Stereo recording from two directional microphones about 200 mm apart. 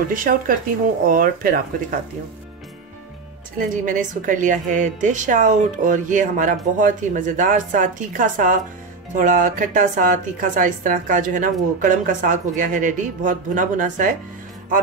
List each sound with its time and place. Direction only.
0.1 s speech: 45° right (ahead or behind)
3.5 s a woman's voice: 40° right (ahead or behind)